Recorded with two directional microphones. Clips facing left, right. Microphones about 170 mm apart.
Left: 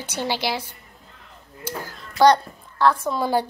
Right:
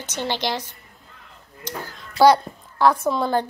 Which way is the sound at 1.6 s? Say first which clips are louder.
Left 2 dB; 10° left (ahead or behind).